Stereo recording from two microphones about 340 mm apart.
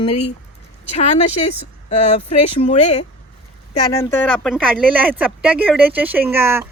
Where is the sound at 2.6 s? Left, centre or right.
Centre.